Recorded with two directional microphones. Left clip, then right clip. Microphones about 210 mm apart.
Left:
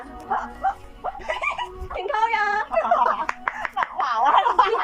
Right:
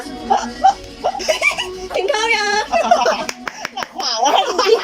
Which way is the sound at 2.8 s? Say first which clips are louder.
Right 4 dB; 60° right (ahead or behind).